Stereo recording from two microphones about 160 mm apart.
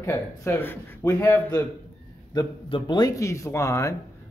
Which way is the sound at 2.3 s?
30° left (ahead or behind).